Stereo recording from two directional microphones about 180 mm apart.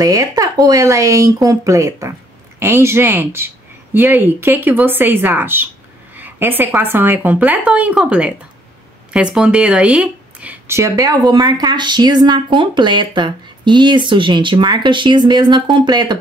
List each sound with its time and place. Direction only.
0.0 s speech: 20° right (ahead or behind)